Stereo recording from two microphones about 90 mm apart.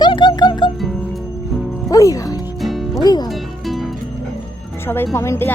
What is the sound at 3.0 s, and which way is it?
Speech, 50° left (ahead or behind).